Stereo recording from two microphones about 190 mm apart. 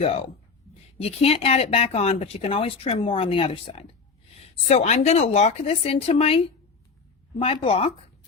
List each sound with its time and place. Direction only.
0.7 s speech: 30° left (ahead or behind)